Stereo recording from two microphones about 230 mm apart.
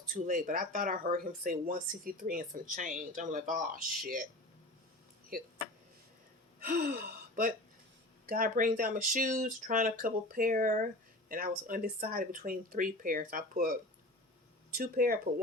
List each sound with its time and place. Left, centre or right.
0.1 s speech: right
6.6 s speech: right
14.8 s speech: right